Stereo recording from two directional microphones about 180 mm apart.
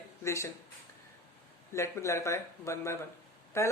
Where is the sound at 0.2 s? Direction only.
15° left (ahead or behind).